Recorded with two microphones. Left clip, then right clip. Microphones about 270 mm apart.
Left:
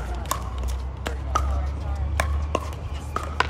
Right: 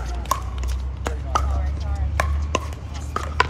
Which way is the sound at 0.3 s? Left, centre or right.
Right.